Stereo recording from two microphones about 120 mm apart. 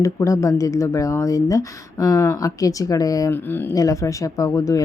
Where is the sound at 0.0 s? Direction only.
25° left (ahead or behind).